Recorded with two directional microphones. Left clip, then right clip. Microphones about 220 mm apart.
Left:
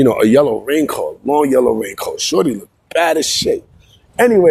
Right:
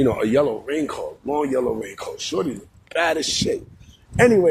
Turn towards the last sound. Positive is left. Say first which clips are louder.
# left 5 dB
turn(degrees=35)  # may be behind; listen again after turning